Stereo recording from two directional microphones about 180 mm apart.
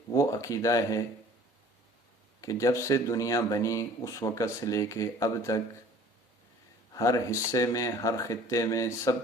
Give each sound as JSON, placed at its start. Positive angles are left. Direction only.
{"t": 0.1, "sound": "speech", "side_deg": 20}
{"t": 2.4, "sound": "speech", "side_deg": 20}
{"t": 6.9, "sound": "speech", "side_deg": 20}